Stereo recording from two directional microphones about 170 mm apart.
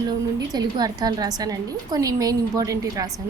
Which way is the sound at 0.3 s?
25° right (ahead or behind).